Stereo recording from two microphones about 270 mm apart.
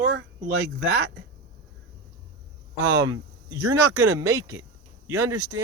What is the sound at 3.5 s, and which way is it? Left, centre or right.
Speech, centre.